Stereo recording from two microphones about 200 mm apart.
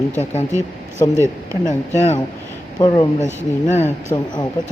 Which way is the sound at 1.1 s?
15° right (ahead or behind).